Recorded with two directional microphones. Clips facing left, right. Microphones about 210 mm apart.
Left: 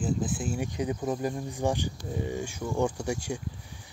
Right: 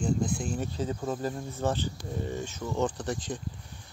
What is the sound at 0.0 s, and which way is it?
Speech, 5° left (ahead or behind).